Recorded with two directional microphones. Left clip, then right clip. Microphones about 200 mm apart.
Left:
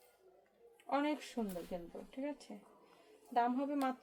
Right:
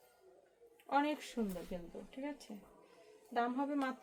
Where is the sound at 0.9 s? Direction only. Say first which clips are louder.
Right 2 dB; 25° right (ahead or behind).